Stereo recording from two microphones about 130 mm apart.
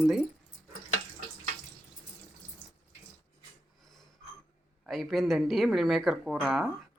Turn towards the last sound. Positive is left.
turn(degrees=-5)  # may be behind; listen again after turning